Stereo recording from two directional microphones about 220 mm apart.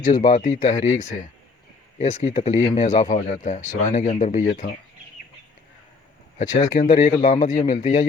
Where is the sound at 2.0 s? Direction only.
30° left (ahead or behind).